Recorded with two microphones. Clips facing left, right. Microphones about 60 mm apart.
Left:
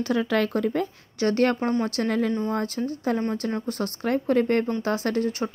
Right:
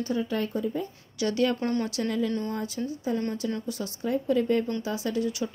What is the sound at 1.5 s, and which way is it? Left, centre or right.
Speech, left.